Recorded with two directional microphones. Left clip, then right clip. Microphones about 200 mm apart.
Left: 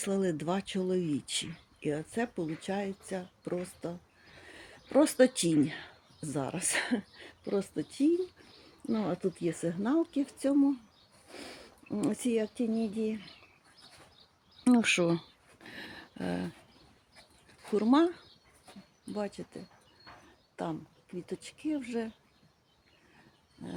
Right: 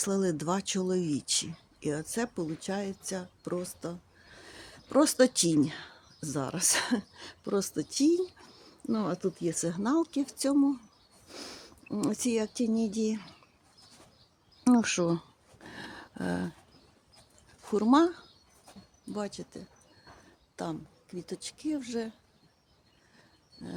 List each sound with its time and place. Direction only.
0.0 s speech: 10° right (ahead or behind)
4.4 s a sound: 5° right (ahead or behind)
6.3 s speech: 5° right (ahead or behind)
14.6 s speech: 5° right (ahead or behind)
15.6 s a sound: 15° right (ahead or behind)
17.7 s speech: 10° right (ahead or behind)
21.2 s speech: centre (ahead or behind)